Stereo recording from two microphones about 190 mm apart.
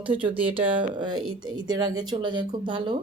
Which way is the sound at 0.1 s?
25° right (ahead or behind).